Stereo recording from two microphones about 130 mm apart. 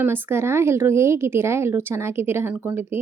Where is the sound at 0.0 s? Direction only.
15° right (ahead or behind).